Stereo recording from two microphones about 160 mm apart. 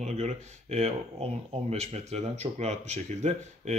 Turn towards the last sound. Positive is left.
turn(degrees=-45)  # may be behind; listen again after turning